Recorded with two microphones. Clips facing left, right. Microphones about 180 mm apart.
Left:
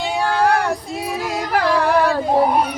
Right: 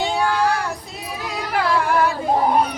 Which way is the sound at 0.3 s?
60° left (ahead or behind).